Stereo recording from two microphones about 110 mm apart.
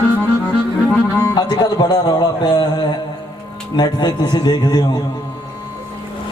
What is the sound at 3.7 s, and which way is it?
A man's voice, 40° left (ahead or behind).